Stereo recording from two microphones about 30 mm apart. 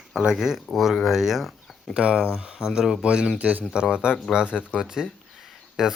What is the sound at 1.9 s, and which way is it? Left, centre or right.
Speech, right.